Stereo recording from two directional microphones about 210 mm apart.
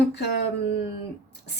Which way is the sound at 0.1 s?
55° left (ahead or behind).